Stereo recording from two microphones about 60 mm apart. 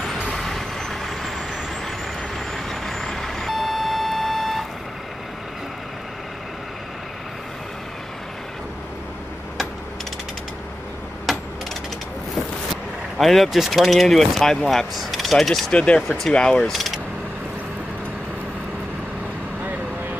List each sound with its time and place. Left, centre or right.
0.3 s vehicle: centre
11.3 s mechanisms: centre
13.2 s speech: centre
15.7 s speech: centre
16.1 s speech: centre
16.7 s speech: centre